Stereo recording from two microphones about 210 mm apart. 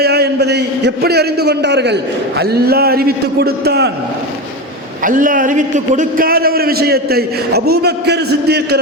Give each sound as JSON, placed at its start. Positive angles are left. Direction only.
{"t": 0.0, "sound": "a man's voice", "side_deg": -50}
{"t": 5.0, "sound": "a man's voice", "side_deg": -40}